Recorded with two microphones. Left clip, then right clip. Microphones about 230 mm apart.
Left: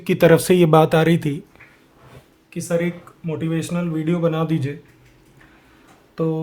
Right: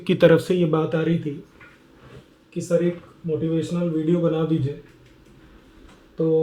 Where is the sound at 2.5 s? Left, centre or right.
Centre.